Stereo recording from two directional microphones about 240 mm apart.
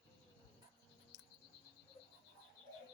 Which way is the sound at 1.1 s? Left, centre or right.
Left.